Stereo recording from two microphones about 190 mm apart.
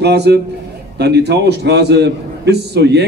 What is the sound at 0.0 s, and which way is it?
A man's voice, 60° right (ahead or behind).